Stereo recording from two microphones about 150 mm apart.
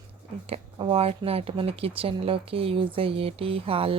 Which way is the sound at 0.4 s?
40° right (ahead or behind).